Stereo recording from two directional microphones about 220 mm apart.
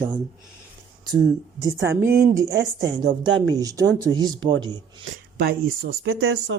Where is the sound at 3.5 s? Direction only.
15° right (ahead or behind).